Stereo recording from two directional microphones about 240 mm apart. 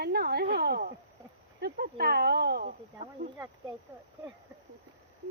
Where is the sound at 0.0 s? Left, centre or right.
Right.